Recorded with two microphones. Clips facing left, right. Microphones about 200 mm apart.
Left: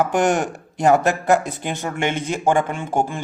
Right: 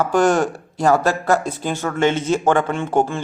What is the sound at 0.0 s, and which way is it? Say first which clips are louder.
Speech: right 2 dB; 15° left (ahead or behind).